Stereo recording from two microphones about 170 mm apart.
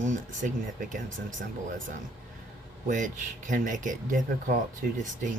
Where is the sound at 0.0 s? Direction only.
45° right (ahead or behind).